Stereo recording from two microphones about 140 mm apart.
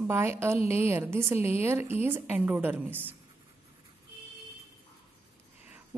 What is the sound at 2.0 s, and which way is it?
A woman's voice, 15° right (ahead or behind).